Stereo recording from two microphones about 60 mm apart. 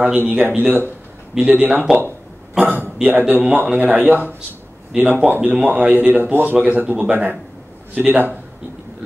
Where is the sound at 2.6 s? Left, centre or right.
Right.